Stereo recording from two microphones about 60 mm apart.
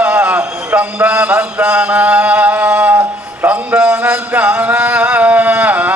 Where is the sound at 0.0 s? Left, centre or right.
Right.